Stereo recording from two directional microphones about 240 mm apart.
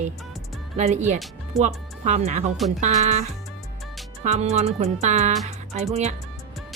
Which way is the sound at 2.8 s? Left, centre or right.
Right.